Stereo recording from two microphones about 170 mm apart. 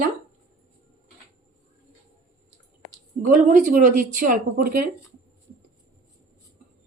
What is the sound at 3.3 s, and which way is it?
Speech, 50° right (ahead or behind).